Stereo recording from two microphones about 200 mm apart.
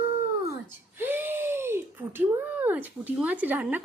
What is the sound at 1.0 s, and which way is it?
Speech, 10° right (ahead or behind).